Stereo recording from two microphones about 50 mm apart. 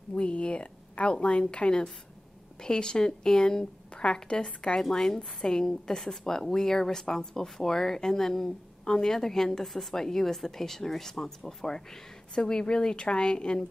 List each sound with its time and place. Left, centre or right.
0.1 s a woman's voice: left